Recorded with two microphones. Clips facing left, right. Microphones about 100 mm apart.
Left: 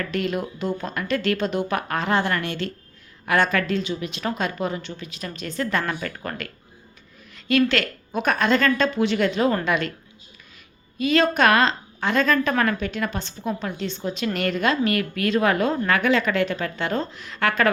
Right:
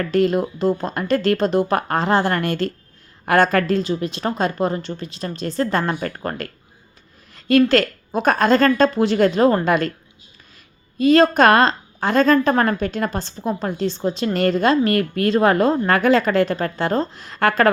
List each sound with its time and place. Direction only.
0.0 s a woman's voice: 35° right (ahead or behind)
7.3 s a sound: 40° right (ahead or behind)
7.7 s a woman's voice: 40° right (ahead or behind)
10.9 s a woman's voice: 35° right (ahead or behind)